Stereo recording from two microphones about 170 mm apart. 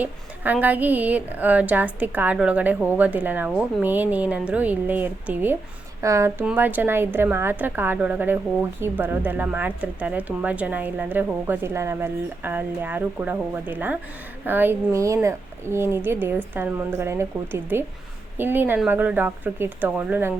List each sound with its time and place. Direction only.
0.0 s speech: 10° right (ahead or behind)